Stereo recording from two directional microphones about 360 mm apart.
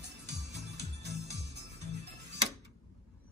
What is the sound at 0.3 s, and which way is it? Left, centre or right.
Music, right.